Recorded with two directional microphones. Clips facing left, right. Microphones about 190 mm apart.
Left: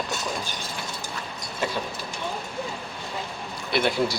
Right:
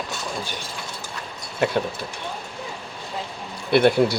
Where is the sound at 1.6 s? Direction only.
60° right (ahead or behind).